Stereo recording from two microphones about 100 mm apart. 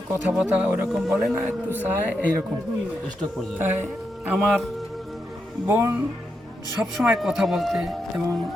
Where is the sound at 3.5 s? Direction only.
20° right (ahead or behind).